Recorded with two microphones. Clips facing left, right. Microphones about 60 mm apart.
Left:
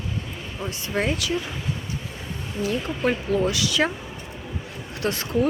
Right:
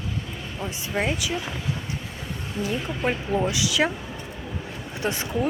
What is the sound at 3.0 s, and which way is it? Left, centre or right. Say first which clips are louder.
Speech: left 2 dB; centre.